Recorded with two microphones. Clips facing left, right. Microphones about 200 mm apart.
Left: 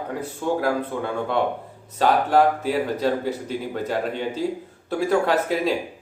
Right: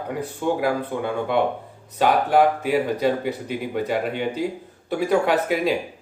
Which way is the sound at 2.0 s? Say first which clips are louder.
Even; 5° right (ahead or behind).